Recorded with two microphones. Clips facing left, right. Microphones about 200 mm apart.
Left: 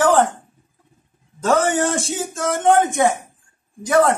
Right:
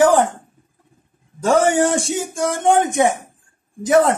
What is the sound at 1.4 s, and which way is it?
A man's voice, 15° right (ahead or behind).